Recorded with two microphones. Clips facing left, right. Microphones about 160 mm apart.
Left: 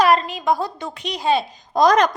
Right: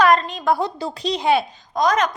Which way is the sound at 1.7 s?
35° left (ahead or behind).